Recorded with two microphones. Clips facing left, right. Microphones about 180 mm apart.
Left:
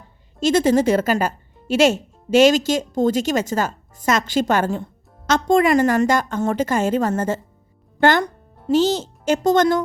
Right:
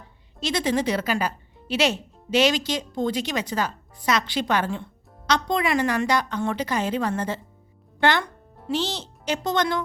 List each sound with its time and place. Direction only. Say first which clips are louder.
0.3 s a woman's voice: left 8 dB; 45° left (ahead or behind)